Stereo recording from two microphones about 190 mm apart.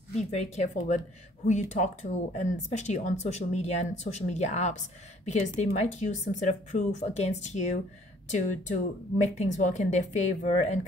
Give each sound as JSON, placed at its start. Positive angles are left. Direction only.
{"t": 0.3, "sound": "speech", "side_deg": 35}